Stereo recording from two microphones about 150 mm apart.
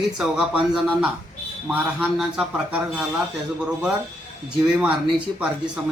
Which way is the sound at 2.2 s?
5° right (ahead or behind).